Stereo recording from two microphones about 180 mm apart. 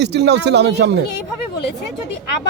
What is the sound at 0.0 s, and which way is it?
Speech, 70° right (ahead or behind).